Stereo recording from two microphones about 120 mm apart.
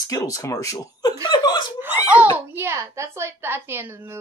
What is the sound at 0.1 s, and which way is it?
Speech, 30° left (ahead or behind).